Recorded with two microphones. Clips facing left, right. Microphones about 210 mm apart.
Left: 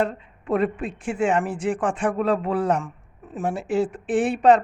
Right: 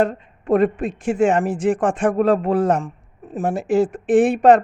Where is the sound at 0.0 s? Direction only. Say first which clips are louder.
Right 5 dB; 45° right (ahead or behind).